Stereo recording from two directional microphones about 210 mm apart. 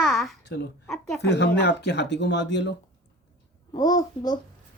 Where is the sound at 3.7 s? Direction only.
20° left (ahead or behind).